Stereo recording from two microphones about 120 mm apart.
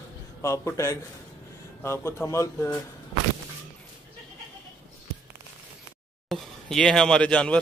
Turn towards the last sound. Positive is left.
turn(degrees=10)  # may be behind; listen again after turning